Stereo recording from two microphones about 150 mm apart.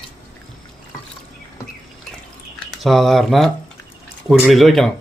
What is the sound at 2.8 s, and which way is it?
A man's voice, centre (ahead or behind).